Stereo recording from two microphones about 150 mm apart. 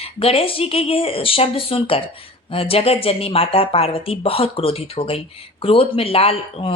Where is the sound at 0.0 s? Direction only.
40° left (ahead or behind).